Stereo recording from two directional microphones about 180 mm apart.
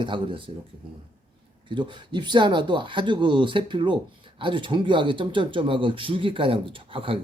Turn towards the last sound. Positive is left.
turn(degrees=-30)  # may be behind; listen again after turning